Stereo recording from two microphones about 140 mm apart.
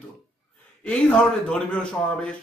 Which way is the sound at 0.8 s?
5° left (ahead or behind).